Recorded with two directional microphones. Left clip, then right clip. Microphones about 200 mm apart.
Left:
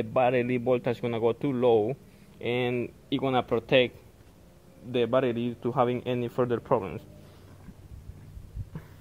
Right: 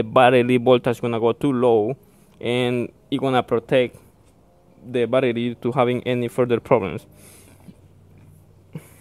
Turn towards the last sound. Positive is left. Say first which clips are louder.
# right 8 dB
turn(degrees=-45)  # may be behind; listen again after turning